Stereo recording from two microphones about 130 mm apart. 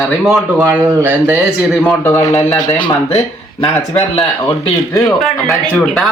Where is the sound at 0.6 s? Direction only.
20° right (ahead or behind).